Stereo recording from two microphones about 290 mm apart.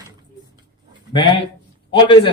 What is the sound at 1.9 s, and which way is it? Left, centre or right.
Speech, centre.